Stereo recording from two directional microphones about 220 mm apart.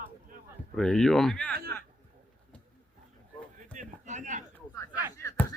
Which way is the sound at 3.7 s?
35° right (ahead or behind).